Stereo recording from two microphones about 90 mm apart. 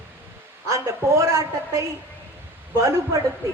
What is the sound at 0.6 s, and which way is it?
A woman's voice, 35° right (ahead or behind).